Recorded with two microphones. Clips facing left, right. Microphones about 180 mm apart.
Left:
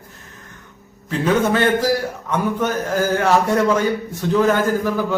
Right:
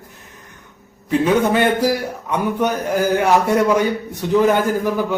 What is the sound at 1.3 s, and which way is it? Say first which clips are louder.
A man's voice: left 1 dB; 15° right (ahead or behind).